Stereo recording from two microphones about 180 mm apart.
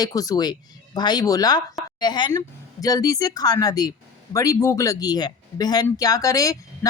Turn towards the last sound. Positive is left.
turn(degrees=20)  # may be behind; listen again after turning